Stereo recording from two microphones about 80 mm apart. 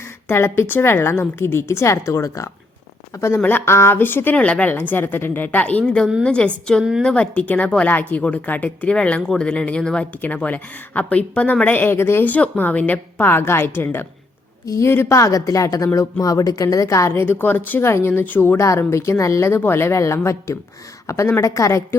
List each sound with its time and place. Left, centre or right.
0.3 s a woman's voice: left